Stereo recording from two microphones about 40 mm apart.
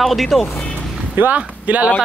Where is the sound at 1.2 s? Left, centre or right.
Right.